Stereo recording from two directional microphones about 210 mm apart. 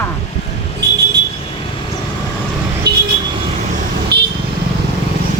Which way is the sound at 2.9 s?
50° right (ahead or behind).